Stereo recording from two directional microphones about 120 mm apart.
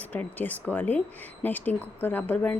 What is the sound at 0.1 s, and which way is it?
Speech, 15° left (ahead or behind).